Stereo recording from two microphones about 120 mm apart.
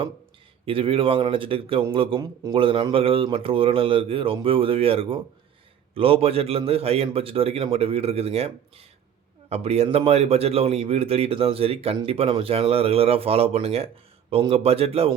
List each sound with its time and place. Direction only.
0.6 s a man's voice: 50° right (ahead or behind)
2.2 s speech: 30° right (ahead or behind)
2.6 s a man's voice: 45° right (ahead or behind)